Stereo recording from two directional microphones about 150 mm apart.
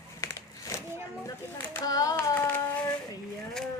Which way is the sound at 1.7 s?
25° left (ahead or behind).